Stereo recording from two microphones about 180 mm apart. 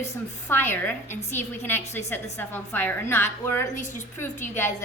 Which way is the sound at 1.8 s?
40° left (ahead or behind).